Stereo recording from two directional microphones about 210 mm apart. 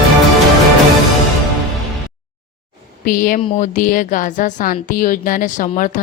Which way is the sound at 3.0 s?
40° left (ahead or behind).